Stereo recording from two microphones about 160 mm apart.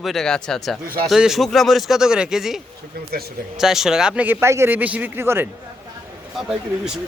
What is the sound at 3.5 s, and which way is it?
Speech, 5° right (ahead or behind).